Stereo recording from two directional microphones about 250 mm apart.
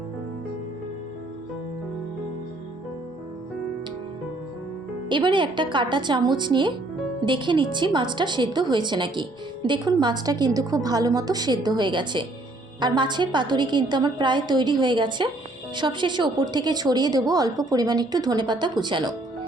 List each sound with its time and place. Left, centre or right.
5.0 s a woman's voice: centre